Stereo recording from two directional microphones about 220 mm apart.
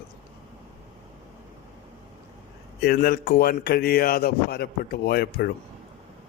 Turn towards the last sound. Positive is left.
turn(degrees=45)  # may be behind; listen again after turning